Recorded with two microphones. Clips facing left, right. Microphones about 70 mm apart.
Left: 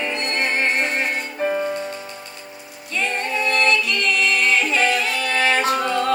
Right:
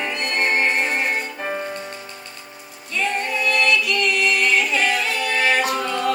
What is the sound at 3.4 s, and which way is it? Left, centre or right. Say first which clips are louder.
Music: even; left.